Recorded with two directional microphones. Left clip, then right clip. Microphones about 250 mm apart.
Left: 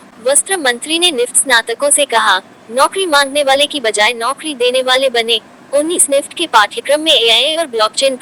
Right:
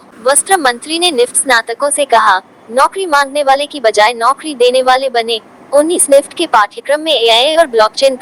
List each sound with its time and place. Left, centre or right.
0.3 s speech: centre